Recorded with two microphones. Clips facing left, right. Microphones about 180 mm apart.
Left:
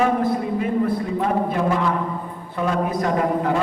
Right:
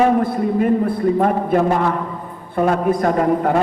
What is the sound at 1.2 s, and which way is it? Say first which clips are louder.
A man's voice: right 3 dB; 50° right (ahead or behind).